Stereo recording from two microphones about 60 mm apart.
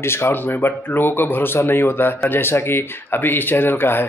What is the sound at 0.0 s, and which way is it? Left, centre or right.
Speech, left.